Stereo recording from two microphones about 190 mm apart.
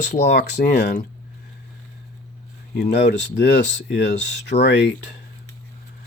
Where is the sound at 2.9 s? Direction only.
65° left (ahead or behind).